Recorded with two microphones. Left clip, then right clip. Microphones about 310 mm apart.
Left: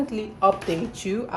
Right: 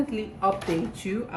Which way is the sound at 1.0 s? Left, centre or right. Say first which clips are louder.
Left 4 dB; centre.